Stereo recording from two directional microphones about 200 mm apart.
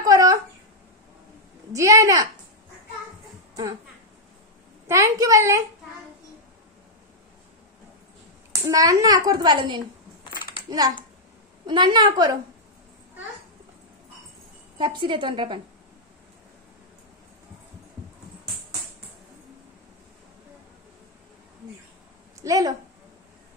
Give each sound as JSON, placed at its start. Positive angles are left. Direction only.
{"t": 0.0, "sound": "a sound", "side_deg": -15}
{"t": 1.7, "sound": "a woman's voice", "side_deg": -15}
{"t": 4.8, "sound": "a child's voice", "side_deg": -15}
{"t": 8.6, "sound": "a child's voice", "side_deg": -20}
{"t": 11.6, "sound": "a child's voice", "side_deg": -20}
{"t": 14.8, "sound": "a child's voice", "side_deg": -25}
{"t": 22.4, "sound": "a woman's voice", "side_deg": -20}